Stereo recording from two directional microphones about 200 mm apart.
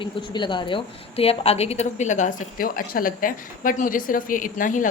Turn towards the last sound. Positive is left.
turn(degrees=40)  # may be behind; listen again after turning